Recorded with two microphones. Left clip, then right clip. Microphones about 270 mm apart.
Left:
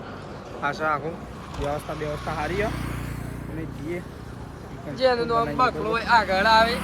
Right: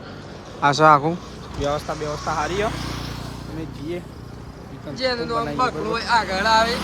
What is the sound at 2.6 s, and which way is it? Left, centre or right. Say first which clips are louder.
Speech: right 4 dB; right.